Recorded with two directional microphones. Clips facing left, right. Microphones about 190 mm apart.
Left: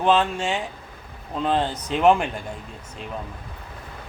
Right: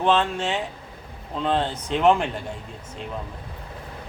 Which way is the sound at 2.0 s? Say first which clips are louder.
Left 1 dB; 10° left (ahead or behind).